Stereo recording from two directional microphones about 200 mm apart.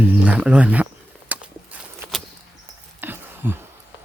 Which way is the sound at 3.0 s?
10° right (ahead or behind).